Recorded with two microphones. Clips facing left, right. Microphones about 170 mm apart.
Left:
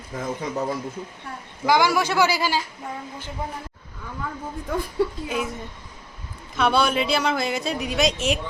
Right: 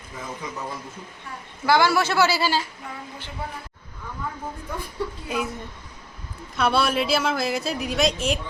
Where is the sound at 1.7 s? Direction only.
15° left (ahead or behind).